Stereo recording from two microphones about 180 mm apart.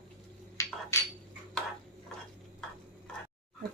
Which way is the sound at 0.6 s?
15° left (ahead or behind).